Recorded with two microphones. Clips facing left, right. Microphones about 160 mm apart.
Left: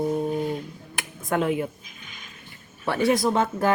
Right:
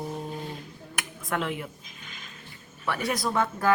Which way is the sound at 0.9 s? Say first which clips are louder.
Left 5 dB; 25° left (ahead or behind).